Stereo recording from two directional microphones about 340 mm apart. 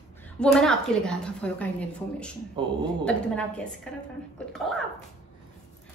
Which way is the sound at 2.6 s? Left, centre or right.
Centre.